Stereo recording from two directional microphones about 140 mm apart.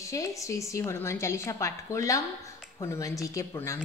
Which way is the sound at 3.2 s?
20° left (ahead or behind).